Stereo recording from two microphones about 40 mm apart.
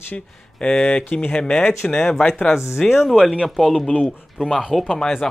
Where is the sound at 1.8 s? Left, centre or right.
Centre.